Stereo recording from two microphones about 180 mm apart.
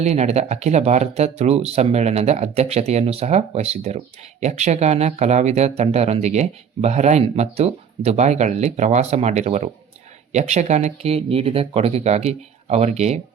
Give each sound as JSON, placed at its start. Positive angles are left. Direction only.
{"t": 0.0, "sound": "speech", "side_deg": -35}